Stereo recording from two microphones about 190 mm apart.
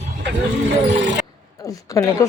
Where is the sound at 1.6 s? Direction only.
20° left (ahead or behind).